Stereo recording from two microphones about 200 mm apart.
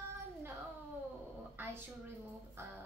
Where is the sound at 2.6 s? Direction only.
10° right (ahead or behind).